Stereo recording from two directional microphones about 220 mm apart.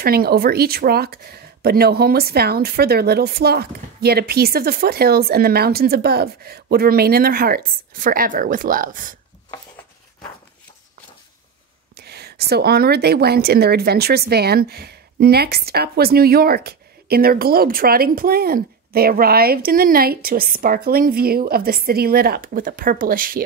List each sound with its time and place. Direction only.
0.0 s speech: 45° right (ahead or behind)
12.0 s speech: 45° right (ahead or behind)